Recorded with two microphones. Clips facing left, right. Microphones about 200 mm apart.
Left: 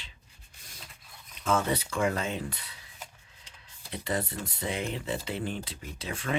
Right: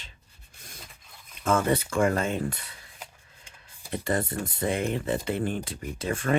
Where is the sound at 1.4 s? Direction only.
50° right (ahead or behind).